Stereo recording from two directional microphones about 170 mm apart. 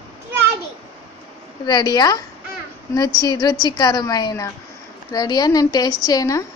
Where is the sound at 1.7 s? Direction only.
25° left (ahead or behind).